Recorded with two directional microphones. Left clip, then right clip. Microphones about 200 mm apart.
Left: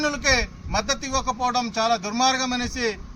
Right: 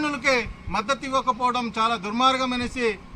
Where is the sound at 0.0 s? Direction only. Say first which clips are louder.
Left 1 dB; 20° left (ahead or behind).